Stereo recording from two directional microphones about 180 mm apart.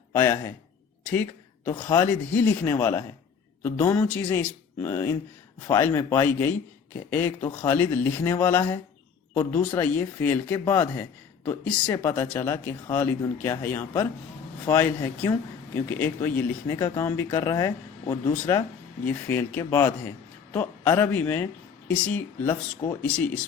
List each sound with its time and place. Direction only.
0.1 s a man's voice: 15° left (ahead or behind)
1.0 s a sound: 10° left (ahead or behind)
2.3 s a man's voice: 10° left (ahead or behind)